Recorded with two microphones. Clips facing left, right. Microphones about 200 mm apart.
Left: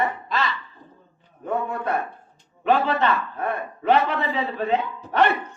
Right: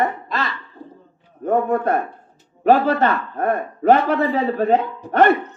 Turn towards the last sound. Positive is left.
turn(degrees=-50)  # may be behind; listen again after turning